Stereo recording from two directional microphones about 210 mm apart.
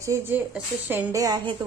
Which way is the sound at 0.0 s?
10° right (ahead or behind).